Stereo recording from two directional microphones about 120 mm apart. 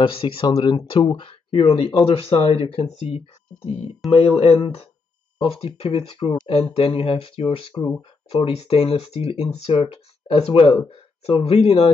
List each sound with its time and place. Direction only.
0.0 s speech: 45° left (ahead or behind)